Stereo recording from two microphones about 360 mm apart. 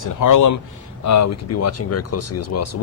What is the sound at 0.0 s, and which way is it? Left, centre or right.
Speech, left.